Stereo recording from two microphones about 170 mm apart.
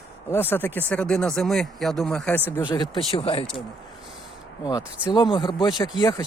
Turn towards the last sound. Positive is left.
turn(degrees=20)  # may be behind; listen again after turning